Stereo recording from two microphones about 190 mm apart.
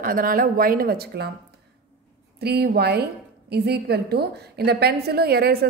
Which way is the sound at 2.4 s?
60° right (ahead or behind).